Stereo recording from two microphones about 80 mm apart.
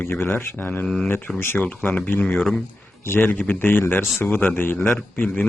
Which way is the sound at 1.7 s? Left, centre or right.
Centre.